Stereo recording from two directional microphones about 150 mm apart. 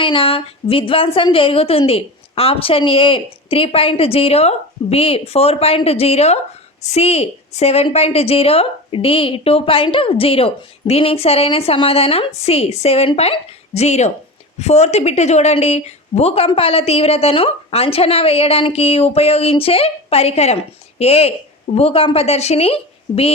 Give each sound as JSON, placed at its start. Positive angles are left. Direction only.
{"t": 0.0, "sound": "a woman's voice", "side_deg": 35}